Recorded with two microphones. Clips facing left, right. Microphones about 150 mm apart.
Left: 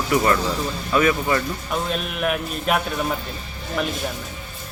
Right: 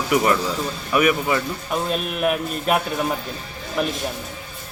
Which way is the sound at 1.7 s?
Centre (ahead or behind).